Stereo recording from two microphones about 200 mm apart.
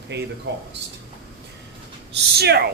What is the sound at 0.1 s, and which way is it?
Speech, 60° right (ahead or behind).